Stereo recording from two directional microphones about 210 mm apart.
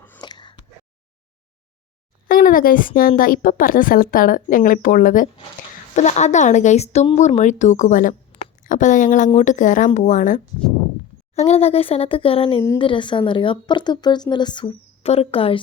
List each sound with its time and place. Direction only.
0.2 s a sound: 20° left (ahead or behind)
2.2 s a woman's voice: 40° left (ahead or behind)
11.3 s speech: 30° left (ahead or behind)